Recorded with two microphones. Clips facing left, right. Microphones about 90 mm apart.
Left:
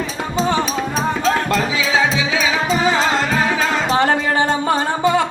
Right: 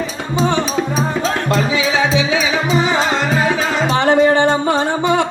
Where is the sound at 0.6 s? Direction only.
Centre (ahead or behind).